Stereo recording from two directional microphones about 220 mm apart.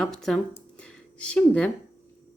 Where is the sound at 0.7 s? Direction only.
5° left (ahead or behind).